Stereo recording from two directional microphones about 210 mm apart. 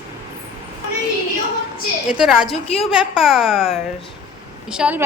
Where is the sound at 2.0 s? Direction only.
5° right (ahead or behind).